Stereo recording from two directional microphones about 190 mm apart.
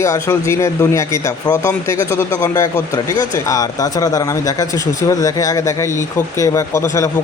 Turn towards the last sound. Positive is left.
turn(degrees=15)  # may be behind; listen again after turning